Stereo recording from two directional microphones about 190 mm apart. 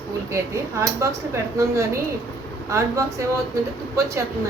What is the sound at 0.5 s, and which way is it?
Speech, 15° right (ahead or behind).